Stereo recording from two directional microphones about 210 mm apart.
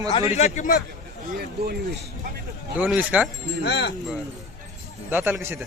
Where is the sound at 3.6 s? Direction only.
50° left (ahead or behind).